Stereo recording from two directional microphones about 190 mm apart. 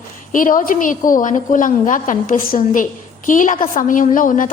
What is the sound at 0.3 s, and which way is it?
A woman's voice, 45° left (ahead or behind).